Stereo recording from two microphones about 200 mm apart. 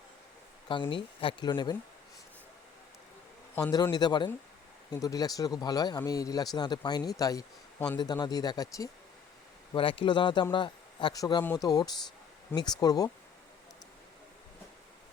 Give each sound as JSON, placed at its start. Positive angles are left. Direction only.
{"t": 0.7, "sound": "speech", "side_deg": 25}
{"t": 3.5, "sound": "speech", "side_deg": 20}